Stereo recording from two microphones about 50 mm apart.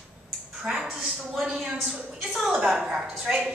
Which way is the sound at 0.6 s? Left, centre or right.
Centre.